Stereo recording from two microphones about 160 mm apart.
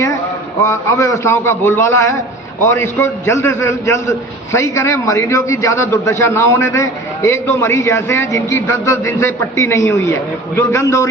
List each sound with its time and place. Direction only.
0.6 s a man's voice: 15° left (ahead or behind)